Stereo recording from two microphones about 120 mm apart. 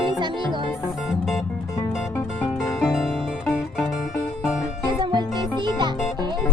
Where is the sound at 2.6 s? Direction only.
Centre (ahead or behind).